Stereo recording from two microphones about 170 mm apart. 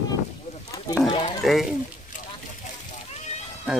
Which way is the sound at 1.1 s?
30° left (ahead or behind).